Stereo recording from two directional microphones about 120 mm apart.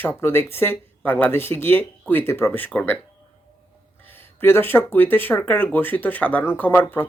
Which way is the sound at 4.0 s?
15° left (ahead or behind).